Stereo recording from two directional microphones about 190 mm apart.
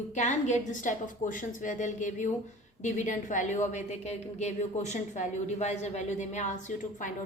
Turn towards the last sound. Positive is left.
turn(degrees=40)  # may be behind; listen again after turning